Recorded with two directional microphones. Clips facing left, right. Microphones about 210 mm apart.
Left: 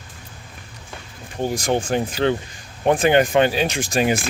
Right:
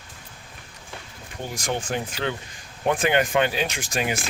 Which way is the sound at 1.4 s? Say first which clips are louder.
Left 8 dB; 35° left (ahead or behind).